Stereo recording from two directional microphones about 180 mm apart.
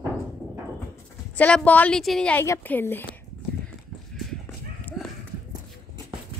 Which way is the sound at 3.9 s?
Centre (ahead or behind).